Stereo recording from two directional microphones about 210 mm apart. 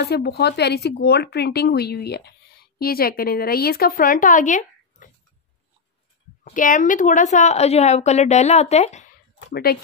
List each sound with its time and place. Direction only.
0.0 s speech: 50° left (ahead or behind)
6.4 s a woman's voice: 40° left (ahead or behind)
9.5 s speech: 45° left (ahead or behind)